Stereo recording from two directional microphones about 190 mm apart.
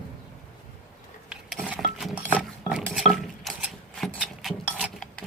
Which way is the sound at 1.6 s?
5° left (ahead or behind).